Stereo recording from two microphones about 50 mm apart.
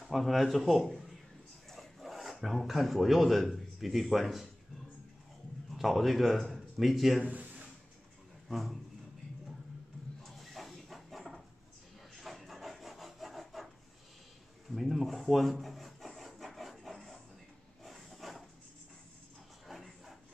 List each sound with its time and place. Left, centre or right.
0.0 s speech: centre
5.8 s speech: centre
7.2 s a sound: right
8.5 s speech: centre
10.2 s a sound: centre
12.2 s rub: centre
14.7 s rub: centre
17.8 s a sound: centre
19.7 s dog: centre